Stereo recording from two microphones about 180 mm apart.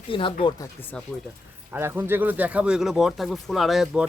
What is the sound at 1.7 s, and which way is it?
Speech, 10° right (ahead or behind).